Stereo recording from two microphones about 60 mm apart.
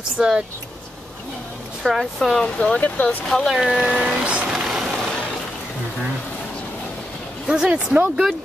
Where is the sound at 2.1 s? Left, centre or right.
Centre.